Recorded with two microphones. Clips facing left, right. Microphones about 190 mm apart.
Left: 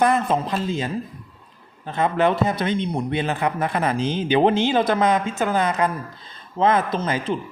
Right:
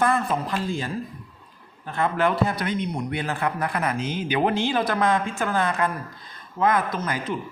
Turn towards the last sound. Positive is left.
turn(degrees=25)  # may be behind; listen again after turning